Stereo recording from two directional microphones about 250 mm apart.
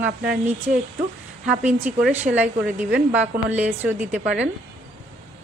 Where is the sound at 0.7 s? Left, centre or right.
Right.